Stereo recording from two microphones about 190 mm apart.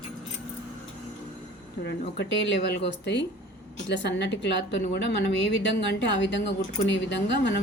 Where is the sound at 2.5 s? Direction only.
65° left (ahead or behind).